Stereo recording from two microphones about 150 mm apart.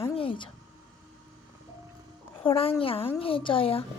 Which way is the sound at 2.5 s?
40° left (ahead or behind).